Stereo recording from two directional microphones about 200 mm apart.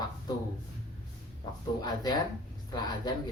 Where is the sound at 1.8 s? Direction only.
20° left (ahead or behind).